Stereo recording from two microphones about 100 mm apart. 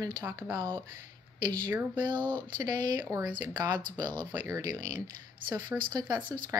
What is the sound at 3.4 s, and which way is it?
Speech, 40° right (ahead or behind).